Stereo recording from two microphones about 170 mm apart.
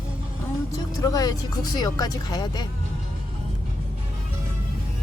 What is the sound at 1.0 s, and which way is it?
Speech, 20° left (ahead or behind).